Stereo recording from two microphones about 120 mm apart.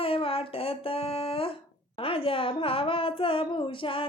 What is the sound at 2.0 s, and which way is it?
A woman's voice, 50° left (ahead or behind).